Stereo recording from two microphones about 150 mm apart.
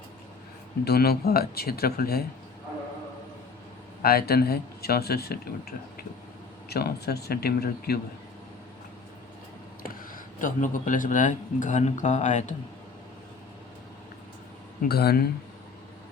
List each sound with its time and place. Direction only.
0.9 s speech: 90° left
4.0 s speech: 90° left
10.4 s speech: 60° left (ahead or behind)
14.8 s speech: 90° left